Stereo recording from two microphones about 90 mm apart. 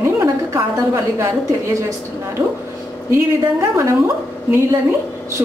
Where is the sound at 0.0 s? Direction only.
30° right (ahead or behind).